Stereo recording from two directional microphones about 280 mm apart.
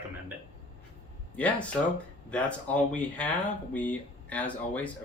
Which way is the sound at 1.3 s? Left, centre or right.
Centre.